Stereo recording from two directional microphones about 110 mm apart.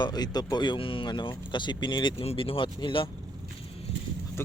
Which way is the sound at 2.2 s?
60° left (ahead or behind).